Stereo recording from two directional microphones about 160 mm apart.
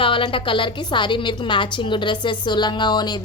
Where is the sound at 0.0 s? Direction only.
35° left (ahead or behind).